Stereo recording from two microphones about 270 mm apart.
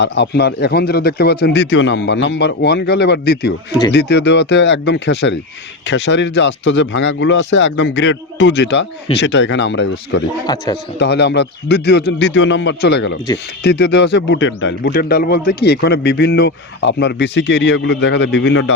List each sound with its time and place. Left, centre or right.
0.0 s speech: left
10.4 s a man's voice: centre
11.0 s speech: left